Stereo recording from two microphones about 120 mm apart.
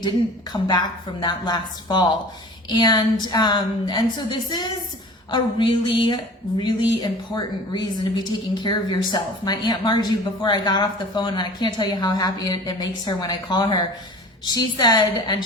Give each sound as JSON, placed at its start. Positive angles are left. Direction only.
{"t": 0.5, "sound": "speech", "side_deg": 35}